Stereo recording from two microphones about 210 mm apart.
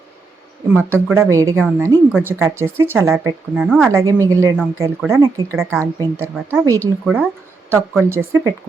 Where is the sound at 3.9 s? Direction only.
15° right (ahead or behind).